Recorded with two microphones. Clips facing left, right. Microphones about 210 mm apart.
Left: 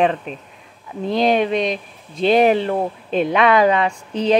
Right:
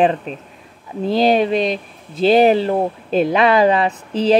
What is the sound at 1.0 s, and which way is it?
Speech, centre (ahead or behind).